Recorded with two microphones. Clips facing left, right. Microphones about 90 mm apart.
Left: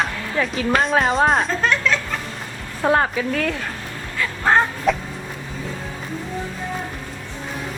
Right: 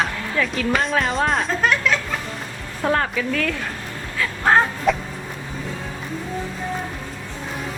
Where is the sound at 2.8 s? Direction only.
15° left (ahead or behind).